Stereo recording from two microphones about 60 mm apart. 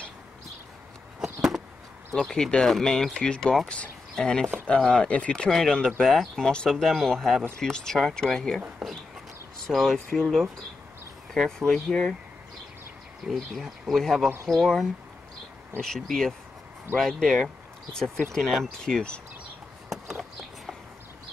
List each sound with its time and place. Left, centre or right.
1.2 s a sound: centre
2.1 s speech: centre
3.6 s speech: centre
6.8 s speech: centre
9.7 s speech: centre
13.2 s speech: centre